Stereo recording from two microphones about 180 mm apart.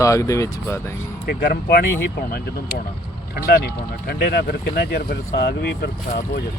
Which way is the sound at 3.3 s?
60° left (ahead or behind).